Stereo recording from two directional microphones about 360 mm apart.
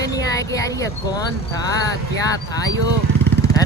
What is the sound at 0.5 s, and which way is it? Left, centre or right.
Speech, centre.